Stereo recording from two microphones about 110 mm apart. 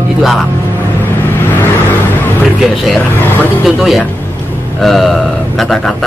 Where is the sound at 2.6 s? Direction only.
Centre (ahead or behind).